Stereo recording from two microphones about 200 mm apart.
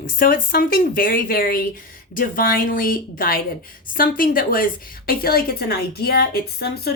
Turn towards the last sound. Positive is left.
turn(degrees=50)  # may be behind; listen again after turning